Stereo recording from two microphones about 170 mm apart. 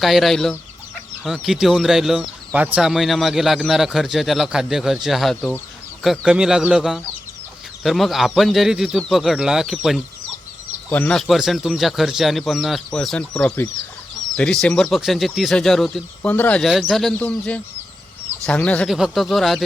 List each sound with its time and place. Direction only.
0.0 s speech: centre (ahead or behind)
10.8 s speech: 10° left (ahead or behind)